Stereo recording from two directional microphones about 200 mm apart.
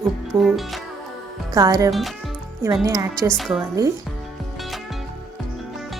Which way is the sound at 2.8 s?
15° right (ahead or behind).